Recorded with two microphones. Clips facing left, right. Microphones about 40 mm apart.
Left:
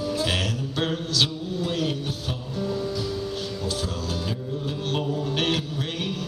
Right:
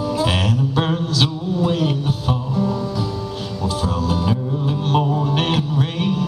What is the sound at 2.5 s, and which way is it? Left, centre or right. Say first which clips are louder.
Music: right 3 dB; right.